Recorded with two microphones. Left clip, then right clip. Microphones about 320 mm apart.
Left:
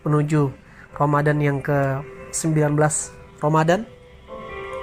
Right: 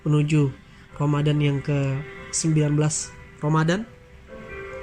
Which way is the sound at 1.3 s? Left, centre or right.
Left.